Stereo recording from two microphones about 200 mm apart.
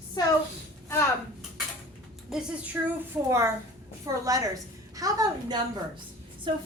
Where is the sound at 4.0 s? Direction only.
15° right (ahead or behind).